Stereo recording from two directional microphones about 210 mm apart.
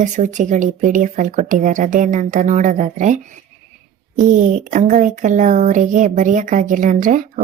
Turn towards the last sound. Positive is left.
turn(degrees=-40)  # may be behind; listen again after turning